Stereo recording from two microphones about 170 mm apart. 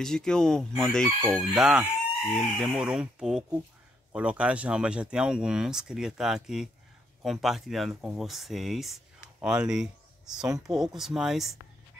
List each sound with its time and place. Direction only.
0.0 s speech: 5° left (ahead or behind)